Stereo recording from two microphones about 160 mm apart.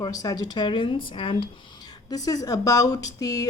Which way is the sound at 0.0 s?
25° left (ahead or behind).